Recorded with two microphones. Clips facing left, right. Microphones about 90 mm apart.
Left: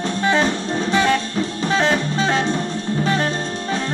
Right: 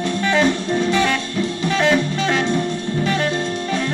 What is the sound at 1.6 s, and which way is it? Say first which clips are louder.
Music: right 1 dB; 35° left (ahead or behind).